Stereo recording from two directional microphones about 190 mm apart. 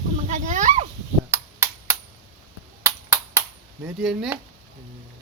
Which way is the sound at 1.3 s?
15° right (ahead or behind).